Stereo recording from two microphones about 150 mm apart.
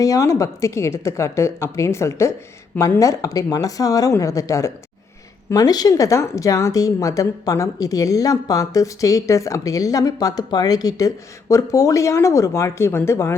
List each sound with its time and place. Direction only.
0.0 s a woman's voice: 20° left (ahead or behind)